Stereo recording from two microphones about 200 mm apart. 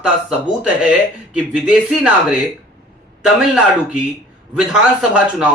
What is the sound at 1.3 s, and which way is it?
Speech, 5° right (ahead or behind).